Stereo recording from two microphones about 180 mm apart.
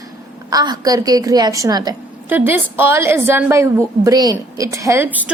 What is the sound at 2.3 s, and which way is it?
A woman's voice, 10° right (ahead or behind).